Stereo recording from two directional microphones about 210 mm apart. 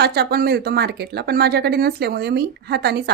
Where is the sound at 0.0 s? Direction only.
50° right (ahead or behind).